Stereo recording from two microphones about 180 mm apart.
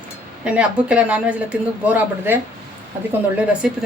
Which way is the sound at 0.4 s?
5° right (ahead or behind).